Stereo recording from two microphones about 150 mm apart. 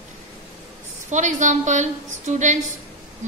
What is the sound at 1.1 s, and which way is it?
A woman's voice, 55° right (ahead or behind).